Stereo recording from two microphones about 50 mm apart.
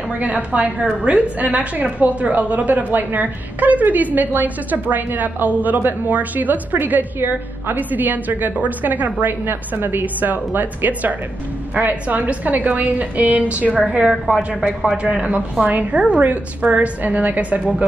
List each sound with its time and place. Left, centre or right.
0.1 s a woman's voice: right
13.8 s a woman's voice: centre; by 17.6 s right